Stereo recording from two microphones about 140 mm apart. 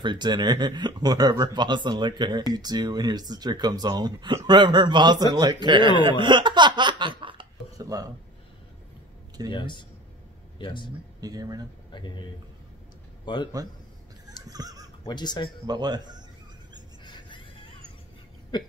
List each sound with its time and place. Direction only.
0.0 s speech: 35° right (ahead or behind)
7.7 s a sound: 25° right (ahead or behind)
9.5 s a man's voice: 35° left (ahead or behind)
11.1 s speech: 25° right (ahead or behind)
11.9 s a man's voice: 35° left (ahead or behind)
14.5 s speech: 25° right (ahead or behind)
15.0 s a man's voice: 30° left (ahead or behind)
15.6 s speech: 30° right (ahead or behind)
17.0 s music: 35° left (ahead or behind)
18.5 s a man's voice: 30° left (ahead or behind)